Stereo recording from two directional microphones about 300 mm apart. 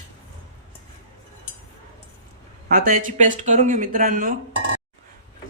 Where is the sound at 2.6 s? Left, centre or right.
Right.